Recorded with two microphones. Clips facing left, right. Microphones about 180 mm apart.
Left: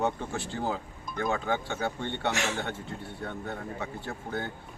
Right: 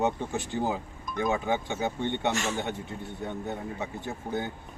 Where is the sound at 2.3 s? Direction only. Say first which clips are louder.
Right 1 dB; 70° left (ahead or behind).